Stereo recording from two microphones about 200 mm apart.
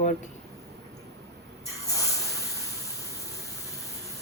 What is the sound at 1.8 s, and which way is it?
Spray, 15° left (ahead or behind).